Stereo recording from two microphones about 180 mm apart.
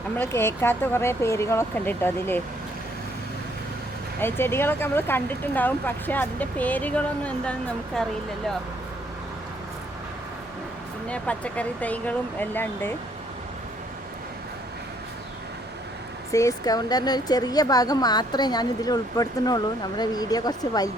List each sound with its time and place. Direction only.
0.2 s speech: 10° left (ahead or behind)
4.2 s speech: 15° left (ahead or behind)
11.1 s speech: 5° left (ahead or behind)
16.3 s speech: 15° left (ahead or behind)